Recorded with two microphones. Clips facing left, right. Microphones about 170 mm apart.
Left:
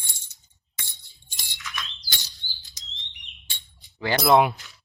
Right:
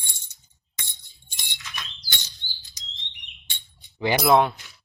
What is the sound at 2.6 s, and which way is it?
Chirp, 20° right (ahead or behind).